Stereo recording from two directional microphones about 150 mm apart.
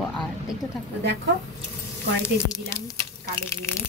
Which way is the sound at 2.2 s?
20° left (ahead or behind).